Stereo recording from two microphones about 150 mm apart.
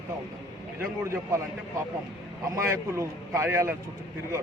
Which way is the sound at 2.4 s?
20° right (ahead or behind).